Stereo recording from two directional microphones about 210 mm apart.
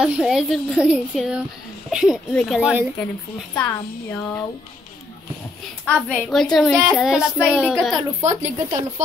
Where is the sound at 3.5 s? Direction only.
10° left (ahead or behind).